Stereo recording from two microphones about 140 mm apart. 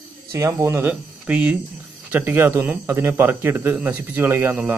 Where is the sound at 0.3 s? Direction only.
20° right (ahead or behind).